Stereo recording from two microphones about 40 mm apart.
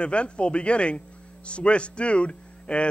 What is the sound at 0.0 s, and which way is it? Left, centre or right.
Speech, left.